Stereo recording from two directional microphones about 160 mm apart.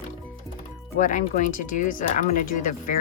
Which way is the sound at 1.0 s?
50° left (ahead or behind).